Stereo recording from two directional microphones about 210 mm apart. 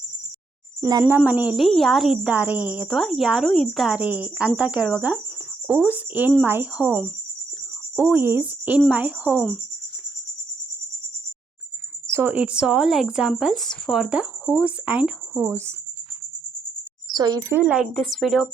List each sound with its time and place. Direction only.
0.8 s a woman's voice: 15° right (ahead or behind)
12.1 s a woman's voice: 10° right (ahead or behind)
17.1 s speech: 20° right (ahead or behind)
17.6 s a woman's voice: 5° right (ahead or behind)